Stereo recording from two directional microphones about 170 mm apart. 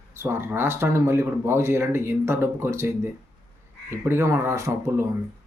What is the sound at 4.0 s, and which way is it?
Speech, 15° right (ahead or behind).